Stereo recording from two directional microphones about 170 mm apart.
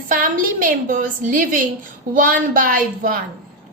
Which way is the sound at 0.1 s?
55° right (ahead or behind).